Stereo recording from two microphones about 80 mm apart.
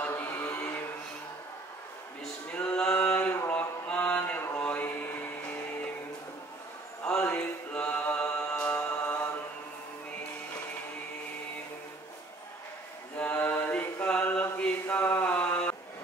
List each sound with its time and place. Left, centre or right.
0.0 s mantra: left
2.5 s a sound: centre
3.5 s music: centre
4.6 s mantra: left
7.2 s music: centre
13.2 s mantra: left